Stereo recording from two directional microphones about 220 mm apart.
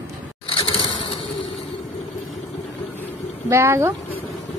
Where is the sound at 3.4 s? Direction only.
10° right (ahead or behind).